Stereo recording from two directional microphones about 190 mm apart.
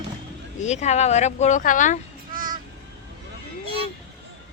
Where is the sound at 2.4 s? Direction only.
45° right (ahead or behind).